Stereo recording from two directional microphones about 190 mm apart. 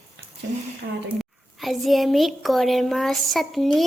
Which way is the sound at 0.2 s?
70° right (ahead or behind).